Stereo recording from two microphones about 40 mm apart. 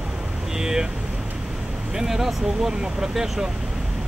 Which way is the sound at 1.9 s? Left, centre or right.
Centre.